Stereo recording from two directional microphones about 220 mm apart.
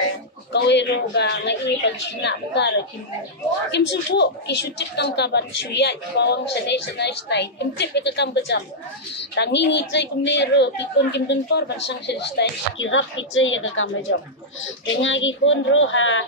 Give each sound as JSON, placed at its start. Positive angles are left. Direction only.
{"t": 0.5, "sound": "speech", "side_deg": 50}
{"t": 3.7, "sound": "speech", "side_deg": 50}